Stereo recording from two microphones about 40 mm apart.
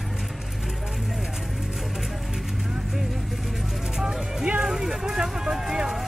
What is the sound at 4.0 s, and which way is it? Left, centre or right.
Speech, centre.